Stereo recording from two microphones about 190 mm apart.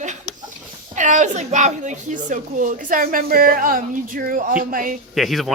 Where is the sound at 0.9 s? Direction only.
40° right (ahead or behind).